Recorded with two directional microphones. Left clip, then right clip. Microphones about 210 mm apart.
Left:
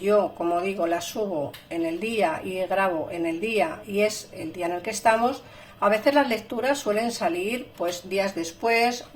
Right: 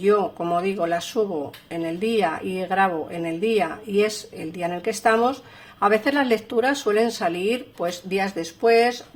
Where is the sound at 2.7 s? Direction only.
45° right (ahead or behind).